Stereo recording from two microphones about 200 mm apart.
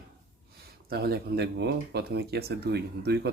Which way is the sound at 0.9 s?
50° right (ahead or behind).